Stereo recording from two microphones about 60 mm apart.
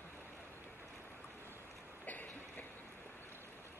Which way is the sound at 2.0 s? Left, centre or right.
Left.